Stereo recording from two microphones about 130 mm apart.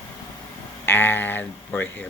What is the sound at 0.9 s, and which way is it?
Speech, 15° left (ahead or behind).